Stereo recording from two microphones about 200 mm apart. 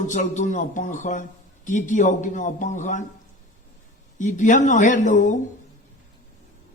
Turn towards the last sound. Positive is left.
turn(degrees=40)  # may be behind; listen again after turning